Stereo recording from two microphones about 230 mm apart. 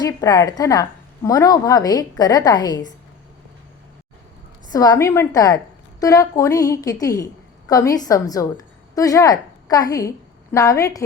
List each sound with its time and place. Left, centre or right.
0.0 s a woman's voice: centre
4.7 s a woman's voice: centre